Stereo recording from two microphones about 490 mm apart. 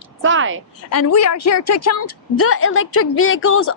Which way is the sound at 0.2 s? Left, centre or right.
Right.